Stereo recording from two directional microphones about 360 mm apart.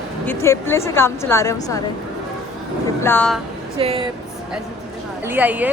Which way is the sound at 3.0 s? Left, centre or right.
Centre.